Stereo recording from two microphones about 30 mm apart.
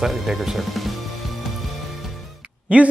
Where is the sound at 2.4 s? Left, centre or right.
Right.